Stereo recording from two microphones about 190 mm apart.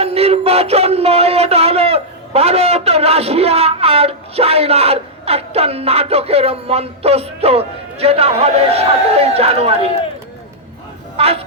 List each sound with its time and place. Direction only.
0.0 s speech: 30° right (ahead or behind)
11.2 s speech: 30° right (ahead or behind)